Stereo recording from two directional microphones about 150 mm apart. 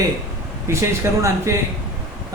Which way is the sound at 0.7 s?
20° right (ahead or behind).